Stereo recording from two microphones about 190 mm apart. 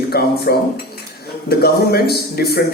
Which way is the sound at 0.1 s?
55° left (ahead or behind).